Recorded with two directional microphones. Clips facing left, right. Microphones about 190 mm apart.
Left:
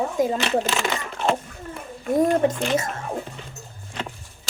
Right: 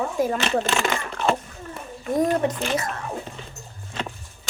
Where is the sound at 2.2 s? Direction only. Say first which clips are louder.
Left 2 dB; 25° left (ahead or behind).